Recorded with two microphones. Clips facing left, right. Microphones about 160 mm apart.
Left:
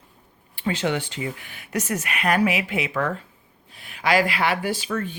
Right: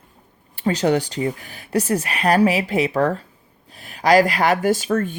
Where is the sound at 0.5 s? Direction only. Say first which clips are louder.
Right 6 dB; 40° right (ahead or behind).